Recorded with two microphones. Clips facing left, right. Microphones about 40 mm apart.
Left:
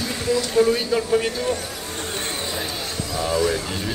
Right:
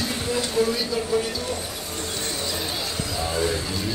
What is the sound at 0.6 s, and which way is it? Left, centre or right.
Speech, left.